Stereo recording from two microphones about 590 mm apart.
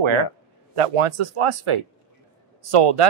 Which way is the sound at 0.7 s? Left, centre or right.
Right.